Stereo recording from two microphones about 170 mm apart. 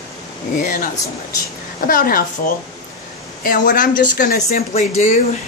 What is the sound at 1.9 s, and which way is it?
Speech, 55° left (ahead or behind).